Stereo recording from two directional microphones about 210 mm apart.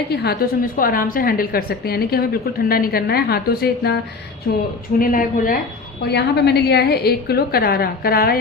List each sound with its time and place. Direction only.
0.1 s a woman's voice: 50° left (ahead or behind)
6.0 s a woman's voice: 50° left (ahead or behind)